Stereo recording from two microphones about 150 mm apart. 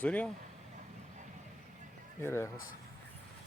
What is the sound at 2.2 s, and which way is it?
Speech, 15° left (ahead or behind).